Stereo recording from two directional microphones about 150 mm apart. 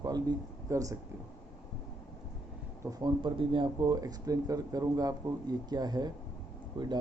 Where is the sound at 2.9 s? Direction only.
30° right (ahead or behind).